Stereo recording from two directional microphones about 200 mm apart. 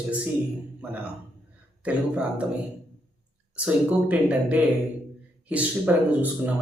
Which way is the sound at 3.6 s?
5° right (ahead or behind).